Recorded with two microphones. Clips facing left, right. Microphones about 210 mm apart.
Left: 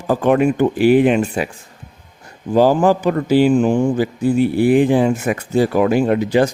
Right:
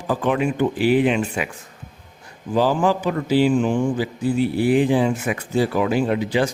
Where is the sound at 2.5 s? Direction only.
45° left (ahead or behind).